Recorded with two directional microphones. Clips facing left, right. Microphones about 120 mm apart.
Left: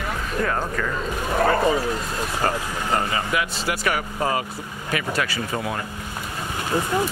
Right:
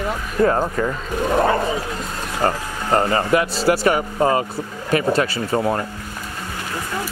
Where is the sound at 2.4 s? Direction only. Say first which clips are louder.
Right 5 dB; 40° right (ahead or behind).